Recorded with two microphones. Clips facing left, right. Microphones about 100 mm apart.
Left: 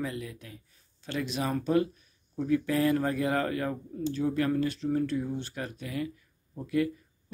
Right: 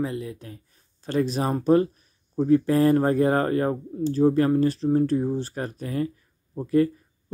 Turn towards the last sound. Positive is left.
turn(degrees=-35)  # may be behind; listen again after turning